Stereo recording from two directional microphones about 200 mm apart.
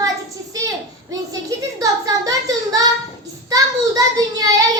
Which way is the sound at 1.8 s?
15° right (ahead or behind).